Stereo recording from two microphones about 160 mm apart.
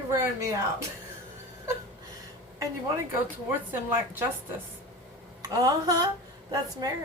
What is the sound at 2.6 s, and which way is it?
Speech, 15° right (ahead or behind).